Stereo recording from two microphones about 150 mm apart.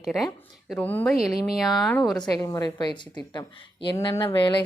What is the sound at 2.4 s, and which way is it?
Speech, 25° left (ahead or behind).